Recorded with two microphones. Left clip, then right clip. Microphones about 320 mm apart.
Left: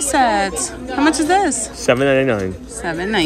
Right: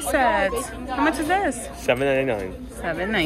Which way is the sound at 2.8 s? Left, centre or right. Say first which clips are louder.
Left 4 dB; centre.